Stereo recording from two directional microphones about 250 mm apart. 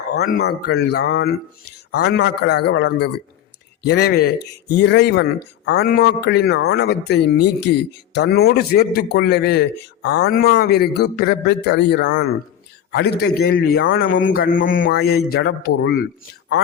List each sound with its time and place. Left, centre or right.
0.1 s a man's voice: left